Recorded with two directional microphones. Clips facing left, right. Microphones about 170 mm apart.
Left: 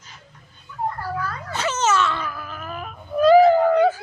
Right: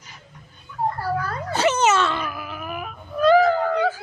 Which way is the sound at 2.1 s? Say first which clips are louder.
Right 1 dB; 15° right (ahead or behind).